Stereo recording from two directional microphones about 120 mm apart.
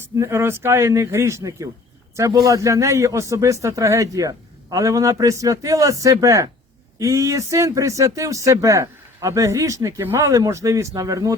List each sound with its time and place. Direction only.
0.2 s a man's voice: 25° right (ahead or behind)